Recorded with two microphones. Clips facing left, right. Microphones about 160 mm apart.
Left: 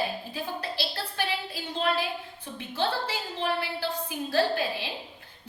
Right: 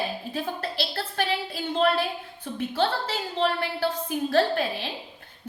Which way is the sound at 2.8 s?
60° right (ahead or behind).